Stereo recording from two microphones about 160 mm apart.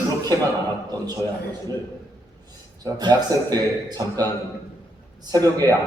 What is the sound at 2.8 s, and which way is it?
A man's voice, 25° right (ahead or behind).